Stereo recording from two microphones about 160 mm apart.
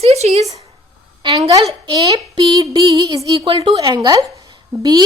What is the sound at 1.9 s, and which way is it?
A woman's voice, 25° right (ahead or behind).